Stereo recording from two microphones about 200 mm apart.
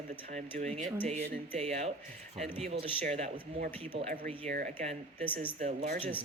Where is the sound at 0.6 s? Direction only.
35° right (ahead or behind).